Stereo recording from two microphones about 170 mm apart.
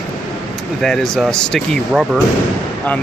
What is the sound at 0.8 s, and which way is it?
Speech, 5° left (ahead or behind).